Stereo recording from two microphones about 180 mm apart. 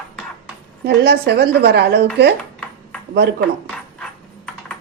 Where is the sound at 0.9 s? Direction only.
65° right (ahead or behind).